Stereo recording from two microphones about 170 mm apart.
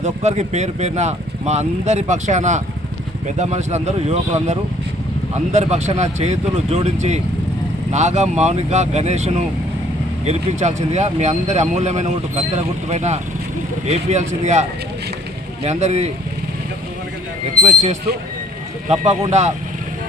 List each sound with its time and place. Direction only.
0.0 s speech: 40° right (ahead or behind)
18.9 s speech: 40° right (ahead or behind)